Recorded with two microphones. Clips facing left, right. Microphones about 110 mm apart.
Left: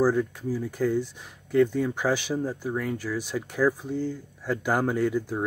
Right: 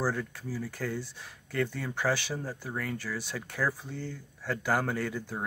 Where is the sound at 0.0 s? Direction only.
15° left (ahead or behind).